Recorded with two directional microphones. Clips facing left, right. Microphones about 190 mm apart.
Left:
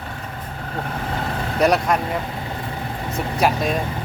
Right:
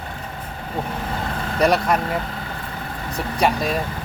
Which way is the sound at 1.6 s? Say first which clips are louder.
Even; centre (ahead or behind).